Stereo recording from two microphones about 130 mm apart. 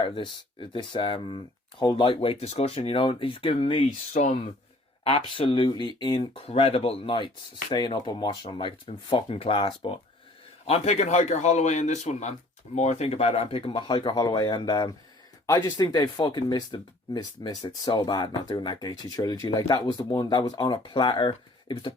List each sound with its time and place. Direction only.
0.0 s speech: 40° left (ahead or behind)
3.8 s speech: 70° left (ahead or behind)
5.0 s speech: 45° left (ahead or behind)